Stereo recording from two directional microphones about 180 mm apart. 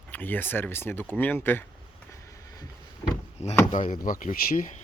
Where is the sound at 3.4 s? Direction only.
35° left (ahead or behind).